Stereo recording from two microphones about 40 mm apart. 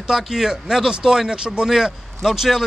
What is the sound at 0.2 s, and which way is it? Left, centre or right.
Speech, centre.